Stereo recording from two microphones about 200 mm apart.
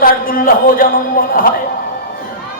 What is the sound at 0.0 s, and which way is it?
A man's voice, 45° left (ahead or behind).